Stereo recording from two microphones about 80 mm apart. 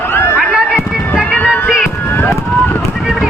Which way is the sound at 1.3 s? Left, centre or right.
Centre.